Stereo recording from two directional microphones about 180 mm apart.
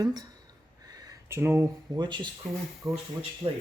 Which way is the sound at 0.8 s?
20° right (ahead or behind).